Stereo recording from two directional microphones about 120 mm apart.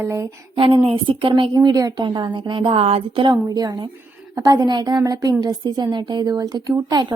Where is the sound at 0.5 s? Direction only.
45° right (ahead or behind).